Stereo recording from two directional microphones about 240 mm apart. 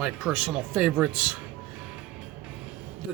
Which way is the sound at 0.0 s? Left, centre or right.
Centre.